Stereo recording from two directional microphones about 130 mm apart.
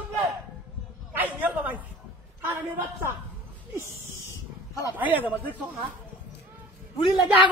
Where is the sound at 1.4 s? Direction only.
15° right (ahead or behind).